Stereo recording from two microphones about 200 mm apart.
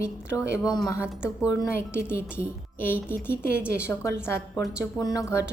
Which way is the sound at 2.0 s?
10° left (ahead or behind).